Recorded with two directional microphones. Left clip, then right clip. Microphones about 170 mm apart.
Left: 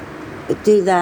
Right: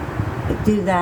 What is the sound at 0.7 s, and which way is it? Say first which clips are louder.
Speech: left 6 dB; 45° left (ahead or behind).